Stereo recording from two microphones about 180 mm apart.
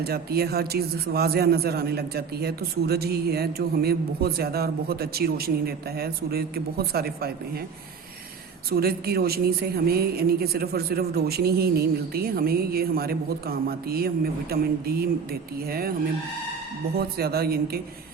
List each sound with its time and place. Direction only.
0.0 s a man's voice: 60° right (ahead or behind)
8.7 s a man's voice: 60° right (ahead or behind)
17.0 s a man's voice: 60° right (ahead or behind)